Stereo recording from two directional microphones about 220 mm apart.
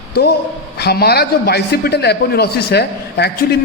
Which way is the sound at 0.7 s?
45° left (ahead or behind).